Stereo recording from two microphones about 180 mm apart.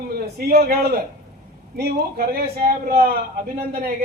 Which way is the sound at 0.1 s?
60° right (ahead or behind).